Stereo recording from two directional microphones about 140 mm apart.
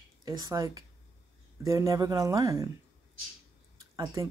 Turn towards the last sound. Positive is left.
turn(degrees=-25)  # may be behind; listen again after turning